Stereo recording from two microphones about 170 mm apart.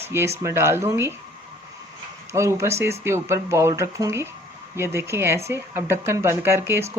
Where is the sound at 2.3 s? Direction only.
15° right (ahead or behind).